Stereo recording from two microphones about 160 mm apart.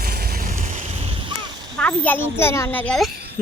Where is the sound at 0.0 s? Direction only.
75° right (ahead or behind); by 1.3 s 35° right (ahead or behind).